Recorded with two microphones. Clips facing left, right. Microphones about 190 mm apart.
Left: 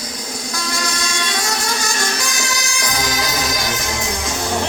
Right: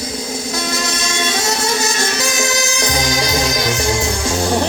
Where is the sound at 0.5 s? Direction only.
25° right (ahead or behind).